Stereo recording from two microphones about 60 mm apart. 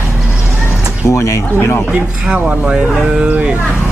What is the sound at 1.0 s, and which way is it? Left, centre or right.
Speech, left.